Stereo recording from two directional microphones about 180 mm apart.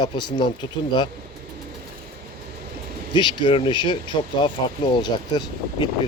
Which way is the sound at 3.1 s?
25° left (ahead or behind).